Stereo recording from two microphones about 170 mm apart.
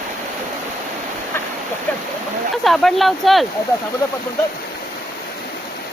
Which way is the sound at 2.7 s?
Centre (ahead or behind).